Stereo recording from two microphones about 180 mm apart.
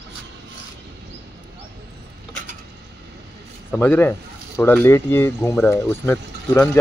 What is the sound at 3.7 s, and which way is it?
Speech, 10° left (ahead or behind).